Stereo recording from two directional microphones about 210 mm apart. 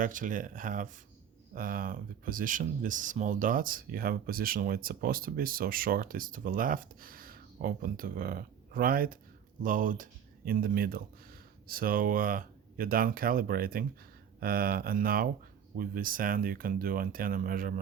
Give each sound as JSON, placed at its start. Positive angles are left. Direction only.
{"t": 0.0, "sound": "speech", "side_deg": -40}